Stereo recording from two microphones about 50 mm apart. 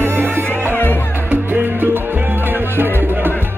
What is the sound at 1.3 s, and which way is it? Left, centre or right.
Music, right.